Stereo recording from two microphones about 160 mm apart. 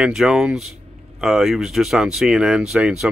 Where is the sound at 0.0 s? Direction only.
5° right (ahead or behind).